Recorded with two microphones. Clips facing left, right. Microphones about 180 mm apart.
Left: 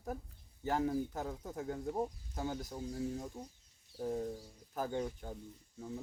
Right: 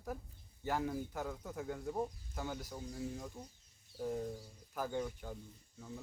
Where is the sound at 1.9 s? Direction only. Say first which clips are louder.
Left 2 dB; 20° left (ahead or behind).